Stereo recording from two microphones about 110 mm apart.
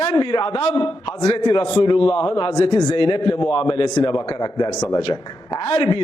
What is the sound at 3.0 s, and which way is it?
A man's voice, 50° left (ahead or behind).